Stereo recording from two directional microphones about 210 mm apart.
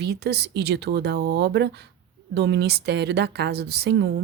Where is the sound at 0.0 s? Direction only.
50° right (ahead or behind).